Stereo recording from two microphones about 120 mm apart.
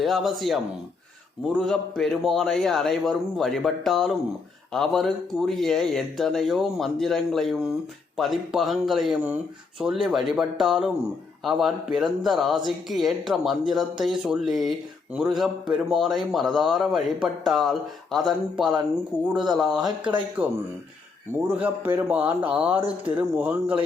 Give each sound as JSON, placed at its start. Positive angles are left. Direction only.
{"t": 0.0, "sound": "a man's voice", "side_deg": 0}
{"t": 19.8, "sound": "speech", "side_deg": -40}
{"t": 21.4, "sound": "a man's voice", "side_deg": -15}